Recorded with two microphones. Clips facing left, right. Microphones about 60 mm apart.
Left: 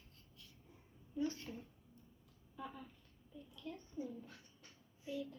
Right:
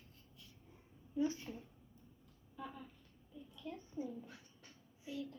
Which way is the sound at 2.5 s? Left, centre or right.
Centre.